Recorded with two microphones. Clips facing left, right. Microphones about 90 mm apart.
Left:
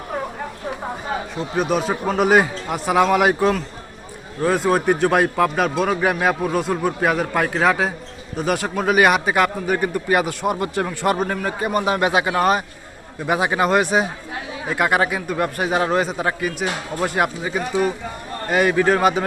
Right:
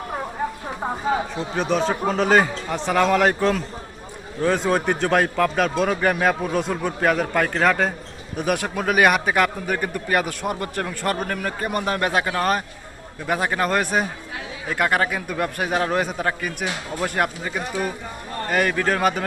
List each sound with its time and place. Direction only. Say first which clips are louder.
1.5 s a man's voice: left 1 dB; 5° left (ahead or behind)